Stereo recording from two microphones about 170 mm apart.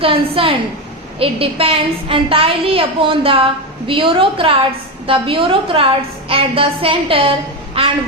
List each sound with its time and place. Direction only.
0.0 s a woman's voice: 30° right (ahead or behind)